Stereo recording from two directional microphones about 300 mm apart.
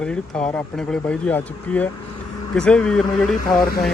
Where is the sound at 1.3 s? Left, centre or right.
Centre.